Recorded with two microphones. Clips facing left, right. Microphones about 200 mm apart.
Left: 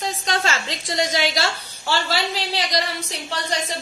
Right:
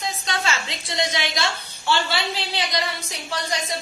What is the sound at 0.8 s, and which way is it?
A woman's voice, 40° left (ahead or behind).